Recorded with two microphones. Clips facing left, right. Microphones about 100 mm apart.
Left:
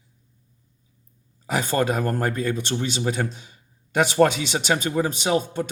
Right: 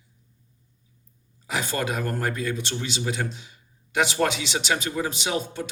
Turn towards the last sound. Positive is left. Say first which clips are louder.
# left 5 dB
turn(degrees=50)  # may be behind; listen again after turning